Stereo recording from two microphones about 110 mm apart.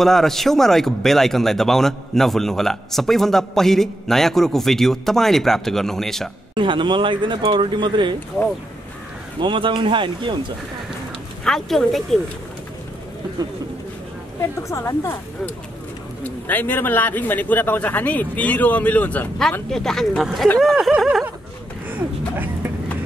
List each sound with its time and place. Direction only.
0.0 s speech: 5° left (ahead or behind)
6.5 s speech: 45° right (ahead or behind)
9.4 s speech: 50° right (ahead or behind)
11.4 s speech: 5° left (ahead or behind)
14.4 s a woman's voice: 25° left (ahead or behind)
16.3 s a man's voice: 15° left (ahead or behind); by 21.3 s 5° right (ahead or behind)